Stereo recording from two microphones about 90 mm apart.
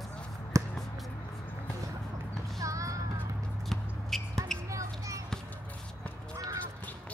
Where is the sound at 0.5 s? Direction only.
35° right (ahead or behind).